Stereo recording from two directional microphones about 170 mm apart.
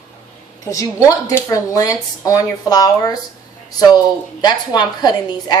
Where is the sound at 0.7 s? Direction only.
20° left (ahead or behind).